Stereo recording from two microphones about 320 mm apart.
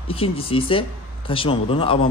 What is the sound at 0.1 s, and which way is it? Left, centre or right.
Speech, centre.